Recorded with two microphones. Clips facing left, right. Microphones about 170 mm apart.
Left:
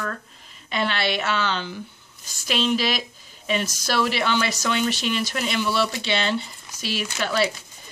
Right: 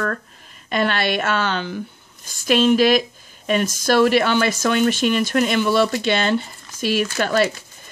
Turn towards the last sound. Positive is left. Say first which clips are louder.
# right 5 dB
turn(degrees=-50)  # may be behind; listen again after turning